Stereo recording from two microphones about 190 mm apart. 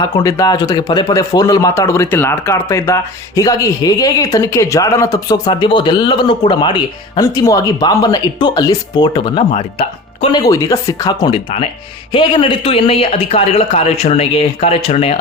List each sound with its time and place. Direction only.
0.0 s speech: 20° left (ahead or behind)
10.4 s a man's voice: 15° left (ahead or behind)